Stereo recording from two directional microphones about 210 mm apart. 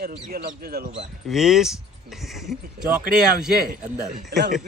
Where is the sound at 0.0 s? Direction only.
45° right (ahead or behind).